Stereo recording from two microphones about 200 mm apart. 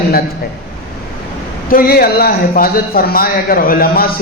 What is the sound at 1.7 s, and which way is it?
A man's voice, 50° left (ahead or behind).